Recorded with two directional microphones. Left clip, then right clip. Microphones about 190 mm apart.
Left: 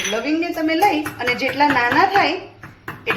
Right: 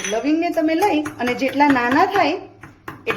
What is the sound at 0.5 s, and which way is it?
Speech, 55° right (ahead or behind).